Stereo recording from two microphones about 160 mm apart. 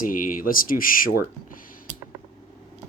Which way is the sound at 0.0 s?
60° left (ahead or behind).